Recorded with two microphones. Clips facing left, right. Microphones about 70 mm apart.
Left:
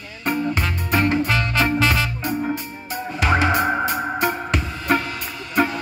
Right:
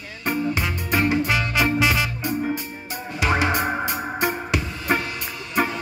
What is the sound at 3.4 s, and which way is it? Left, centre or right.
Music, centre.